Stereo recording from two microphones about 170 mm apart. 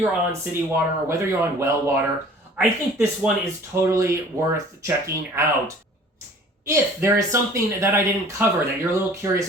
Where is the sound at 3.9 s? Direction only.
20° right (ahead or behind).